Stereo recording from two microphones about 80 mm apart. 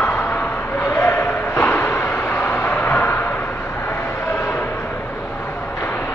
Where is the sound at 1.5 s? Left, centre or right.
Left.